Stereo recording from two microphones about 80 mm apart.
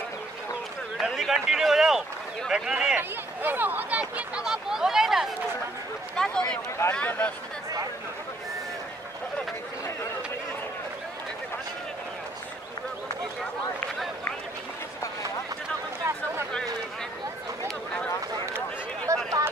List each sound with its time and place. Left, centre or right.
1.0 s a man's voice: centre
3.0 s speech: right; by 5.3 s centre
6.1 s speech: centre
19.1 s a sound: right